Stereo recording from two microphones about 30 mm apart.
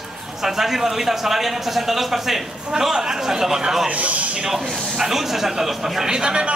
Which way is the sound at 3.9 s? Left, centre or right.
Right.